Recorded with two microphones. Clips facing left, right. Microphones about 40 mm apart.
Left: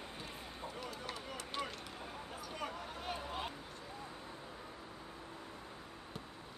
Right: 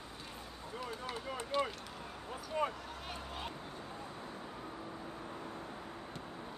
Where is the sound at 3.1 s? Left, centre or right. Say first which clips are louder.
Left 3 dB; centre.